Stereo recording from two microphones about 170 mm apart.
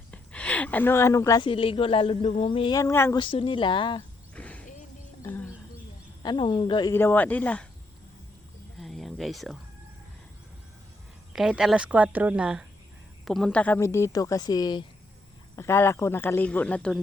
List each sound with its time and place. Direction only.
0.1 s a sound: 5° left (ahead or behind)
1.5 s speech: 30° left (ahead or behind)
3.2 s speech: 30° left (ahead or behind)
4.4 s a sound: 10° left (ahead or behind)
5.2 s bird: 10° left (ahead or behind)
6.2 s speech: 25° left (ahead or behind)
6.9 s speech: 10° left (ahead or behind)
8.8 s a sound: centre (ahead or behind)
11.3 s a woman's voice: 5° right (ahead or behind)